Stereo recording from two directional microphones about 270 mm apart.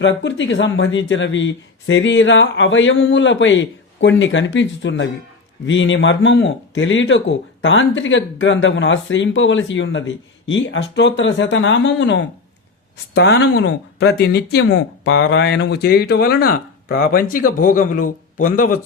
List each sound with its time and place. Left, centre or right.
0.0 s speech: left